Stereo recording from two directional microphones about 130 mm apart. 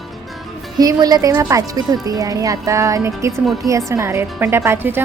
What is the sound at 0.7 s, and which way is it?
A woman's voice, 30° right (ahead or behind).